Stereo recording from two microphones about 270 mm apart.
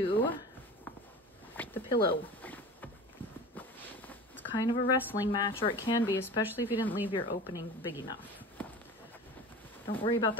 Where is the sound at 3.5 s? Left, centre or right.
Centre.